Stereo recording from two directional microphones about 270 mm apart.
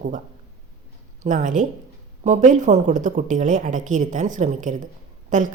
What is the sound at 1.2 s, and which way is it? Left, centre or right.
A woman's voice, right.